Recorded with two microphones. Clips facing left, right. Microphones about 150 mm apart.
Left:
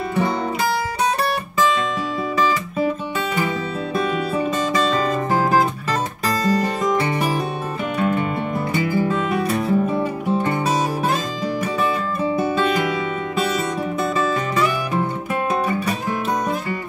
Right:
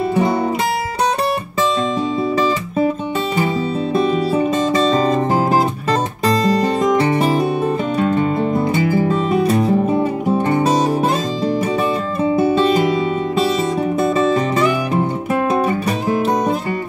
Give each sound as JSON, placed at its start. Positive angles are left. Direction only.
{"t": 3.9, "sound": "music", "side_deg": -30}
{"t": 12.2, "sound": "music", "side_deg": -25}
{"t": 14.0, "sound": "music", "side_deg": -25}